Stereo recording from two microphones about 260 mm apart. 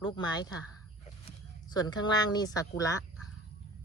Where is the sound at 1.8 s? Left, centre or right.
Centre.